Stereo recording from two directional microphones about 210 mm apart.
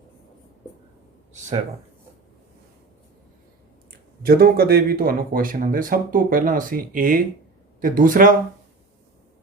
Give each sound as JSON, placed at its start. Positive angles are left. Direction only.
{"t": 1.3, "sound": "speech", "side_deg": -35}
{"t": 4.2, "sound": "speech", "side_deg": -45}